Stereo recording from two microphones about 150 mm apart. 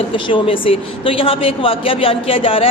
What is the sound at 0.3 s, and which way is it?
A woman's voice, 35° left (ahead or behind).